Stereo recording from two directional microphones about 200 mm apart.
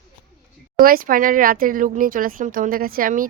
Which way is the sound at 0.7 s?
45° right (ahead or behind).